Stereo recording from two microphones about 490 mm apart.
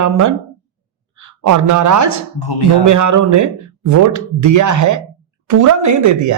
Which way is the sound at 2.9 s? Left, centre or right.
Right.